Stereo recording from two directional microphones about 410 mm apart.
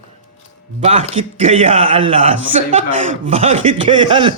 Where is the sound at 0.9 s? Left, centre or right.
Centre.